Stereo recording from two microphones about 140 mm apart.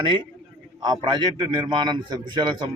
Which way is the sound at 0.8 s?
30° right (ahead or behind).